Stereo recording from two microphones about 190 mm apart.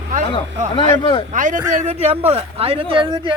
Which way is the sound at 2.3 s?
30° right (ahead or behind).